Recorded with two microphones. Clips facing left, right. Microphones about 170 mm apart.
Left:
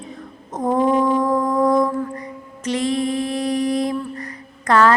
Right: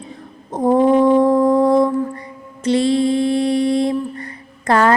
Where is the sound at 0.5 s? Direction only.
30° right (ahead or behind).